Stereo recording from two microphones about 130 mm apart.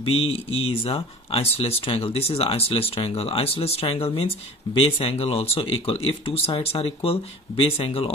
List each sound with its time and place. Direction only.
0.0 s speech: 50° left (ahead or behind)